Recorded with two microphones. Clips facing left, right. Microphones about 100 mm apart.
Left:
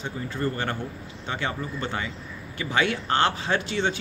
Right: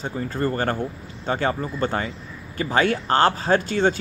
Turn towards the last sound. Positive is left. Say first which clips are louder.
# right 6 dB
turn(degrees=-45)  # may be behind; listen again after turning